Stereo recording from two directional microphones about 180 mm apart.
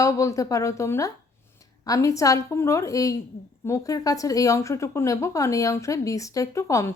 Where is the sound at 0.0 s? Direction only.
15° left (ahead or behind).